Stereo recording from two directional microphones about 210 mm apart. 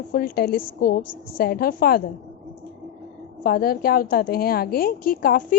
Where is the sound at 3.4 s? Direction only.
45° left (ahead or behind).